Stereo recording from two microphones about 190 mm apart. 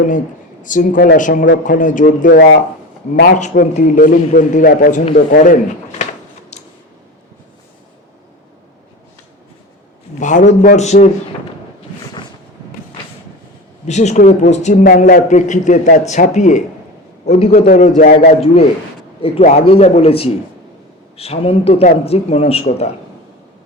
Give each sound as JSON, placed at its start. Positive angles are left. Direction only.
{"t": 0.6, "sound": "a man's voice", "side_deg": 45}
{"t": 6.5, "sound": "a sound", "side_deg": 35}
{"t": 10.2, "sound": "a man's voice", "side_deg": 40}
{"t": 13.8, "sound": "a man's voice", "side_deg": 35}
{"t": 19.2, "sound": "a man's voice", "side_deg": 35}